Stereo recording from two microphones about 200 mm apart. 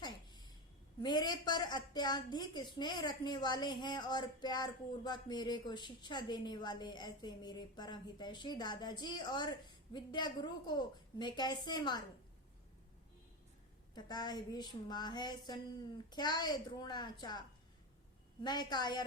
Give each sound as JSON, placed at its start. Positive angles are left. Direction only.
{"t": 0.0, "sound": "a sound", "side_deg": 20}
{"t": 1.0, "sound": "speech", "side_deg": 20}
{"t": 13.9, "sound": "speech", "side_deg": 20}
{"t": 18.4, "sound": "speech", "side_deg": 20}